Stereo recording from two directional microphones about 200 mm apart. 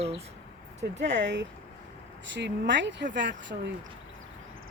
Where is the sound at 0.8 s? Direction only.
35° right (ahead or behind).